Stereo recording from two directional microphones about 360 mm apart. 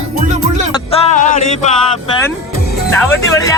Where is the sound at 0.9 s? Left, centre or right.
Centre.